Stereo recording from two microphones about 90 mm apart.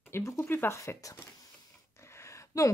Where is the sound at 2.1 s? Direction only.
30° left (ahead or behind).